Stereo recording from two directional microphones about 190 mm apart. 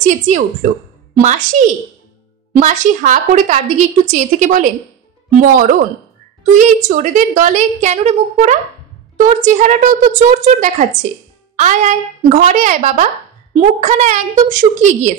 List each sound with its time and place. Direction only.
0.0 s a woman's voice: 40° right (ahead or behind)